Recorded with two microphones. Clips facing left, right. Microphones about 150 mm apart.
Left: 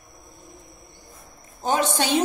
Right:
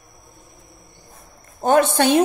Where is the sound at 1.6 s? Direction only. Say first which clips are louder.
Right 7 dB; 55° right (ahead or behind).